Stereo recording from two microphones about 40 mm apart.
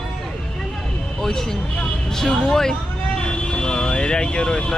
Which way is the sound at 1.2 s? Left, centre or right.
Centre.